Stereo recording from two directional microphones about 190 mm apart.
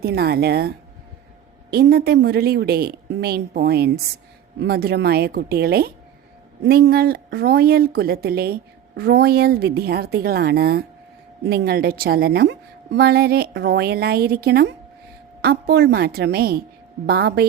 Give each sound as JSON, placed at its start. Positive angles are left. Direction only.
{"t": 0.0, "sound": "a woman's voice", "side_deg": -60}